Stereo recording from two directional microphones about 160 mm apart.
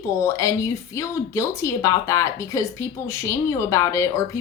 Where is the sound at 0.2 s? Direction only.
20° left (ahead or behind).